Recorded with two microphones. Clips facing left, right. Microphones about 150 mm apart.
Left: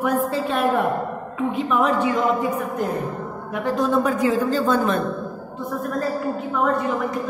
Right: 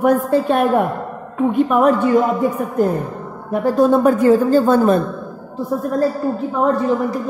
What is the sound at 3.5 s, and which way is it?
A woman's voice, 45° right (ahead or behind).